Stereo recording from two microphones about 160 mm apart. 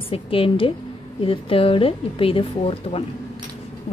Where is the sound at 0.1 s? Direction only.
35° left (ahead or behind).